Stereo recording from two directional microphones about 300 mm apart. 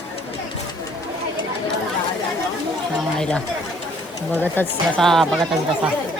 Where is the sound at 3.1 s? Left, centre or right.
Centre.